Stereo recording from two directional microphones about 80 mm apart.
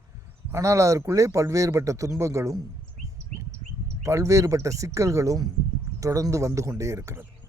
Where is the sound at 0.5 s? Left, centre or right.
Right.